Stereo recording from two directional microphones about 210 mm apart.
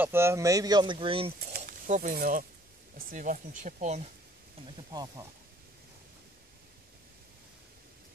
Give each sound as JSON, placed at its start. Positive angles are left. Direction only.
{"t": 0.0, "sound": "speech", "side_deg": -10}
{"t": 1.5, "sound": "a sound", "side_deg": -40}
{"t": 3.1, "sound": "speech", "side_deg": -40}
{"t": 4.6, "sound": "speech", "side_deg": -20}